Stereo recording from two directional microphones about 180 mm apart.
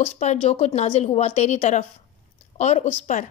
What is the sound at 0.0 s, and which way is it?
A woman's voice, 40° left (ahead or behind).